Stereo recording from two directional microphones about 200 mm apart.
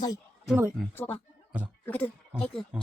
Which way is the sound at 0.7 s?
10° left (ahead or behind).